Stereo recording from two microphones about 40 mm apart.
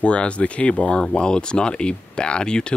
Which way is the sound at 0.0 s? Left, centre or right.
Left.